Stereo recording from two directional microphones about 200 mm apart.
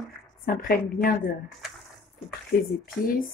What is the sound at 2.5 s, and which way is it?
Speech, 50° left (ahead or behind).